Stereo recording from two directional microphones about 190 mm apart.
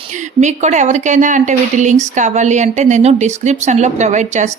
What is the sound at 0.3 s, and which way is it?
A woman's voice, 40° right (ahead or behind).